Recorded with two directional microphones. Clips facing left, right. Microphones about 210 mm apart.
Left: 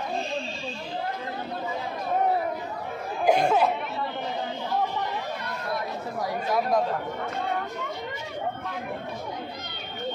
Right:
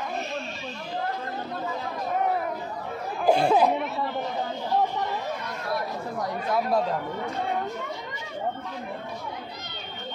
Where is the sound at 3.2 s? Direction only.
30° right (ahead or behind).